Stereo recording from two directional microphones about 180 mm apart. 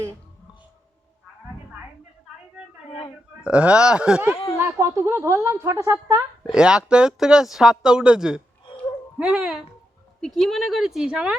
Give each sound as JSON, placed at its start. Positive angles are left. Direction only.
{"t": 3.4, "sound": "a woman's voice", "side_deg": -5}
{"t": 6.5, "sound": "speech", "side_deg": -5}